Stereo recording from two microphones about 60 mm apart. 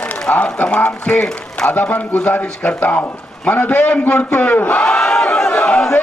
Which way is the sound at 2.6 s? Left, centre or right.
Left.